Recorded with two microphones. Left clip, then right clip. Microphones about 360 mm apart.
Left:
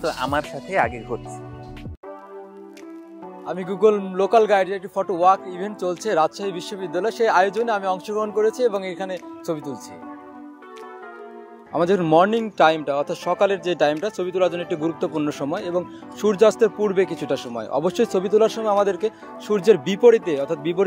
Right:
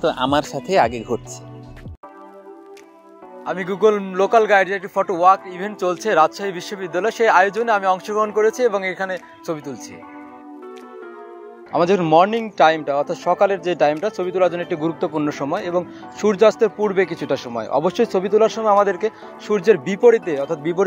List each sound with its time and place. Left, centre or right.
0.0 s speech: right
3.4 s speech: centre
11.7 s speech: centre